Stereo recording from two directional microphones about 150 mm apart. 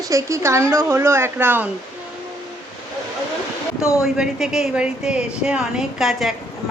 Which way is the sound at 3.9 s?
5° right (ahead or behind).